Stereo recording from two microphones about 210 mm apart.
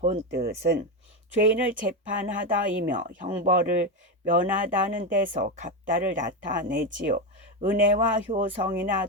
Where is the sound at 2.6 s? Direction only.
40° right (ahead or behind).